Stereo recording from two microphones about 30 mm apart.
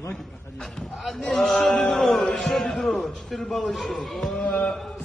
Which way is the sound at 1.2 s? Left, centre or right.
Centre.